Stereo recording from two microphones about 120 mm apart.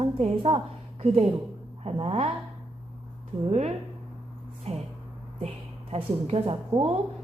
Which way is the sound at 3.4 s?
65° right (ahead or behind).